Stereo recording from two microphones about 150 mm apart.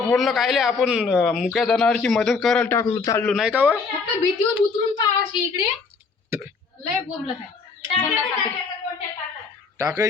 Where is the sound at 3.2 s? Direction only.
5° right (ahead or behind).